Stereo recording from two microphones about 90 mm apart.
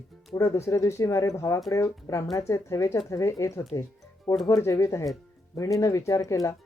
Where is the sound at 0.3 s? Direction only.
35° left (ahead or behind).